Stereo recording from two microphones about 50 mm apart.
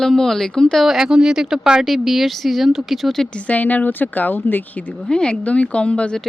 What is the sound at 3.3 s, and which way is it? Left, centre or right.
Speech, left.